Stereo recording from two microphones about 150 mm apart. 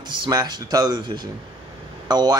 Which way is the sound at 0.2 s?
30° right (ahead or behind).